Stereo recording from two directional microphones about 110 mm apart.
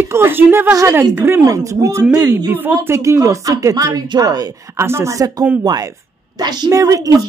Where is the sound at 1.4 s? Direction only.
30° right (ahead or behind).